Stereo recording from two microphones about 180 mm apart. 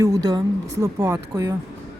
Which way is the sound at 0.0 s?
20° right (ahead or behind).